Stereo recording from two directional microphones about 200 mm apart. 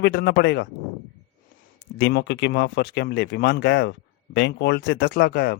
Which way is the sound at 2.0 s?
60° left (ahead or behind).